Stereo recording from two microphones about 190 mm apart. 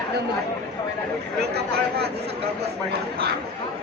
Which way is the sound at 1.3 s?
60° right (ahead or behind).